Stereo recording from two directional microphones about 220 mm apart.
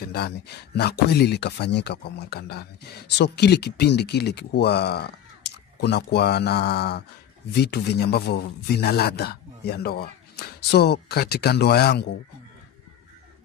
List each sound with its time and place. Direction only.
0.7 s a man's voice: 50° left (ahead or behind)